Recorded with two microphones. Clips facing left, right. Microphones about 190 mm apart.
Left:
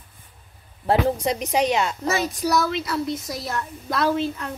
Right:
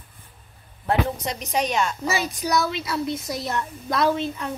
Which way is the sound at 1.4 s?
20° left (ahead or behind).